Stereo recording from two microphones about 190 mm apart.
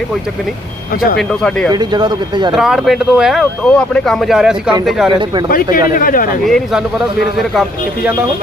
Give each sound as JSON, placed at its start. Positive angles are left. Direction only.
{"t": 1.7, "sound": "speech", "side_deg": -20}
{"t": 2.6, "sound": "speech", "side_deg": 0}
{"t": 5.9, "sound": "speech", "side_deg": 45}
{"t": 6.4, "sound": "speech", "side_deg": 0}